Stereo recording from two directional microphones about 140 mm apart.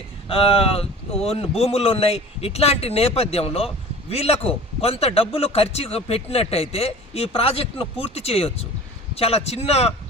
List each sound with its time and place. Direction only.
0.3 s a man's voice: 40° left (ahead or behind)